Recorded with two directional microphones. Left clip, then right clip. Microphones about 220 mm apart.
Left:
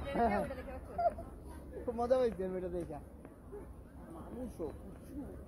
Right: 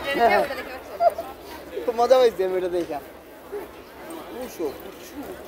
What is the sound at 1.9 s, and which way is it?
Speech, 5° right (ahead or behind).